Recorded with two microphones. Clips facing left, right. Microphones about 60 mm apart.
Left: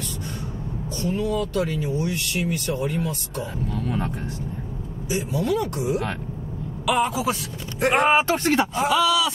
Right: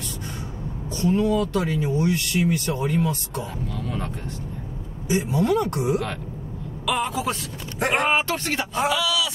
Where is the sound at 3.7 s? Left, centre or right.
Left.